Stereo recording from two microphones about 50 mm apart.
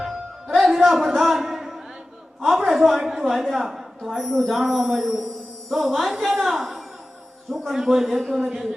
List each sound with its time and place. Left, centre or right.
0.0 s music: centre
0.8 s a sound: centre
2.4 s a woman's voice: centre
8.2 s a man's voice: centre
8.4 s a man's voice: centre